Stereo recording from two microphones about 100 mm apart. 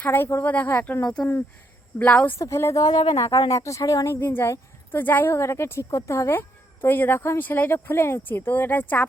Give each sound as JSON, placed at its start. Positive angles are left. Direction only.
{"t": 0.0, "sound": "speech", "side_deg": 25}
{"t": 2.4, "sound": "a woman's voice", "side_deg": 30}